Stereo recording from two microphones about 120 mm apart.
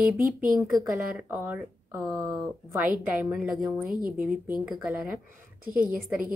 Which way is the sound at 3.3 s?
Centre (ahead or behind).